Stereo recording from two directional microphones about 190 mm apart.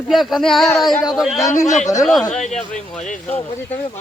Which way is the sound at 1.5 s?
15° left (ahead or behind).